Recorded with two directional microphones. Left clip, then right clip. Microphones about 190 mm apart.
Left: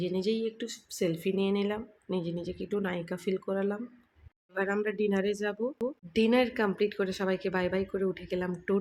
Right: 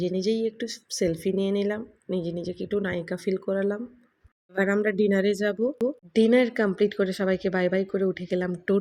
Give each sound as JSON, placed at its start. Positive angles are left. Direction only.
{"t": 0.0, "sound": "speech", "side_deg": -15}